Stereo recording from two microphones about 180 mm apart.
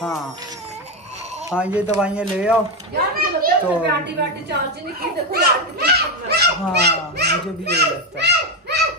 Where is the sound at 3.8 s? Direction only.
70° right (ahead or behind).